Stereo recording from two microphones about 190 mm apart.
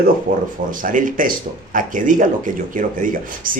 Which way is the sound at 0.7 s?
45° right (ahead or behind).